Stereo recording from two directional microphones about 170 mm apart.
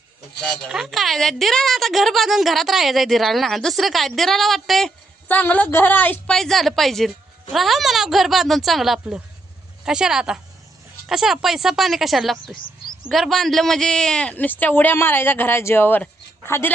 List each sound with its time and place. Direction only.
0.4 s a man's voice: centre (ahead or behind)